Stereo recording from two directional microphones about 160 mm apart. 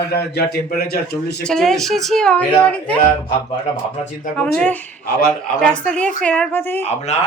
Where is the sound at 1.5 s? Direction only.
Centre (ahead or behind).